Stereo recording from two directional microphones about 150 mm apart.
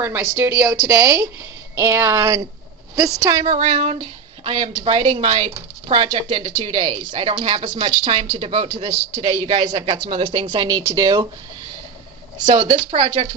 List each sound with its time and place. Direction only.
0.0 s speech: 15° right (ahead or behind)
3.4 s speech: 50° right (ahead or behind); by 10.8 s 30° right (ahead or behind)
10.8 s speech: 20° right (ahead or behind)
12.5 s speech: 35° right (ahead or behind)